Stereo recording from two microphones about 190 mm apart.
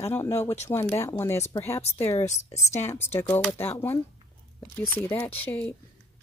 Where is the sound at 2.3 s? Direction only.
35° left (ahead or behind).